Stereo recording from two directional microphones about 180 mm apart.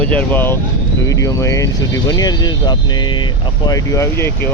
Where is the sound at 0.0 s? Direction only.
10° left (ahead or behind).